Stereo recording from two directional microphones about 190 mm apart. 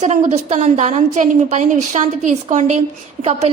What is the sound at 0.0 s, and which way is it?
A woman's voice, 35° right (ahead or behind).